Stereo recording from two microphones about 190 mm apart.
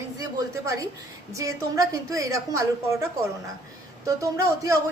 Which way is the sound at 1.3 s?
15° right (ahead or behind).